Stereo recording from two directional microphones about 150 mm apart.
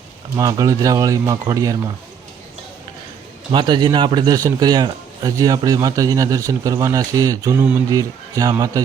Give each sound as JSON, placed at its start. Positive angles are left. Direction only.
{"t": 0.3, "sound": "speech", "side_deg": -25}
{"t": 3.5, "sound": "speech", "side_deg": -30}